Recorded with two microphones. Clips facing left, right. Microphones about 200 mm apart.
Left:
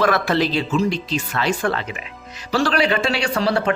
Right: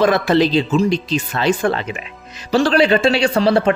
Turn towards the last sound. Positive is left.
turn(degrees=-25)  # may be behind; listen again after turning